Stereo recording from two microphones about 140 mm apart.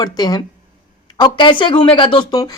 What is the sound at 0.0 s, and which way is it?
A woman's voice, 30° left (ahead or behind).